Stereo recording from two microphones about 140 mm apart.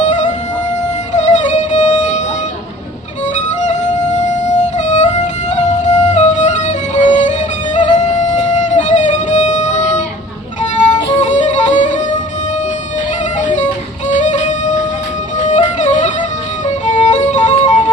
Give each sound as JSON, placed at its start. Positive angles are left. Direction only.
{"t": 1.1, "sound": "music", "side_deg": 60}
{"t": 4.3, "sound": "music", "side_deg": 60}
{"t": 11.2, "sound": "music", "side_deg": 60}
{"t": 14.1, "sound": "music", "side_deg": 60}